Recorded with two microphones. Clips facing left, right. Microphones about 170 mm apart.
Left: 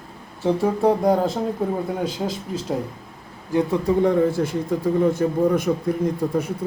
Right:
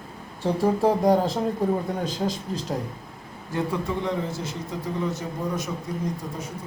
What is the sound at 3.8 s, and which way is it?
A man's voice, 50° left (ahead or behind).